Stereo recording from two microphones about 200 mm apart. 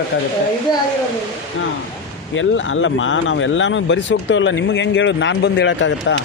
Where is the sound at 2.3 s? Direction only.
70° left (ahead or behind).